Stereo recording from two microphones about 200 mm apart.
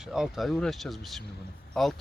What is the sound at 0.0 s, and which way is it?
Speech, centre (ahead or behind).